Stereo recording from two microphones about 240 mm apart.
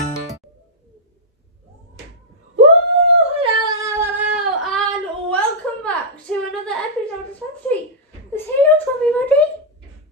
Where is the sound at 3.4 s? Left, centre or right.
Centre.